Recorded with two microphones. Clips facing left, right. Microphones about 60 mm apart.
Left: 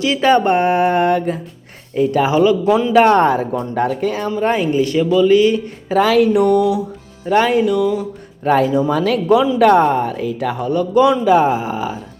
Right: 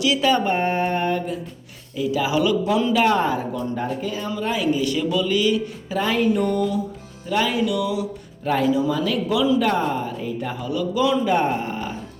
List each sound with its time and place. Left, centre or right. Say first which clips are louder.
0.0 s a man's voice: left 6 dB; left
0.4 s mantra: left 7 dB; left
2.0 s a man's voice: left 7 dB; left
2.3 s speech: left 5 dB; left
2.9 s speech: left 10 dB; left
4.4 s a man's voice: left 5 dB; left
5.9 s speech: left 8 dB; left
7.3 s speech: left 8 dB; left
7.6 s speech: left 6 dB; left
8.4 s speech: left 6 dB; left
10.6 s a man's voice: left 8 dB; left
11.1 s speech: left 7 dB; left